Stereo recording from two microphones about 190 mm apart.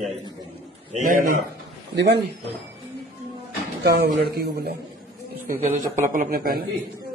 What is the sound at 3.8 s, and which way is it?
Speech, 60° right (ahead or behind).